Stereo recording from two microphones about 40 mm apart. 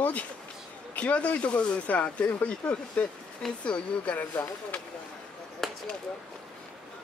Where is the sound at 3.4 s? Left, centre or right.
Centre.